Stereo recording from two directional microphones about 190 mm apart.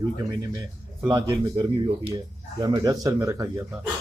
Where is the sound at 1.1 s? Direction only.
20° right (ahead or behind).